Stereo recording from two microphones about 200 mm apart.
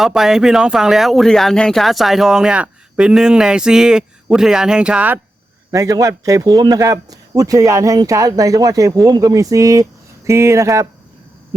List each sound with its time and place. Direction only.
0.0 s a man's voice: centre (ahead or behind)